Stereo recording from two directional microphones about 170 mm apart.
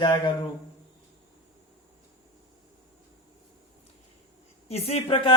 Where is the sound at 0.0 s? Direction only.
30° left (ahead or behind).